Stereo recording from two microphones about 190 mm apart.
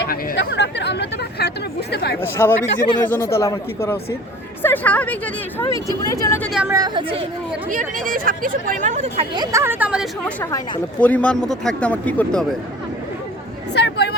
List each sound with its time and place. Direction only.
0.1 s speech: 65° left (ahead or behind)
2.2 s a man's voice: 15° left (ahead or behind)
6.5 s speech: 5° right (ahead or behind)
6.7 s speech: 20° right (ahead or behind)
7.7 s speech: 45° right (ahead or behind)
9.3 s speech: 20° right (ahead or behind)
10.2 s a man's voice: 10° left (ahead or behind)
13.7 s a sound: 60° left (ahead or behind)